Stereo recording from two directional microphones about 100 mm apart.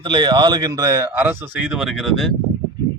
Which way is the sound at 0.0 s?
50° right (ahead or behind).